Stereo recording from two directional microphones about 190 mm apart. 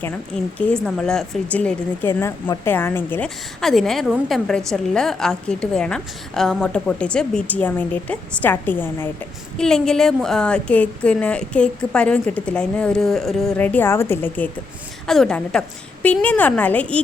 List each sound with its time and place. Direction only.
0.7 s a woman's voice: 5° left (ahead or behind)